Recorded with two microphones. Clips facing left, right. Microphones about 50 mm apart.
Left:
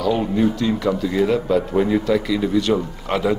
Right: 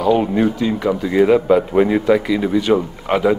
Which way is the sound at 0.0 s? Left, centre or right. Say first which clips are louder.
Right 4 dB; right.